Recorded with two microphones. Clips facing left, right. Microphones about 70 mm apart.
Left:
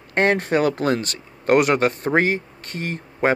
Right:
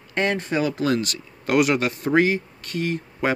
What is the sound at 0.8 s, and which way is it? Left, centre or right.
Speech, left.